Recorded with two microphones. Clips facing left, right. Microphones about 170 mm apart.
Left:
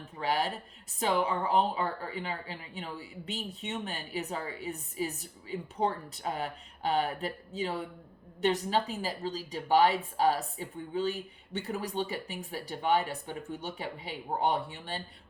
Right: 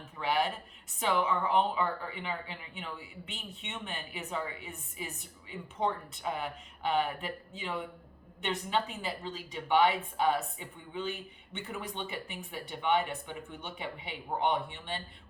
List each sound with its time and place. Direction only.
0.2 s a woman's voice: 35° left (ahead or behind)